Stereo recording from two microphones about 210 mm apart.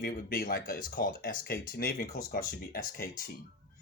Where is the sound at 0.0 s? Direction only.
45° left (ahead or behind).